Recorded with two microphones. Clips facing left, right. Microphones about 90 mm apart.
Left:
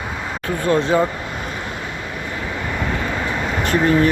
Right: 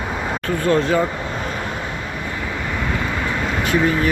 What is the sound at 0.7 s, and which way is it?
Speech, 20° left (ahead or behind).